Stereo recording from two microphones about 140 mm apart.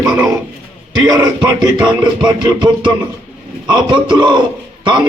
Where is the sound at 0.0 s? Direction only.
20° right (ahead or behind).